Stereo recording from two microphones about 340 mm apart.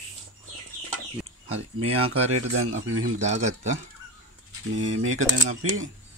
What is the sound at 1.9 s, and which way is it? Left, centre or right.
Speech, right.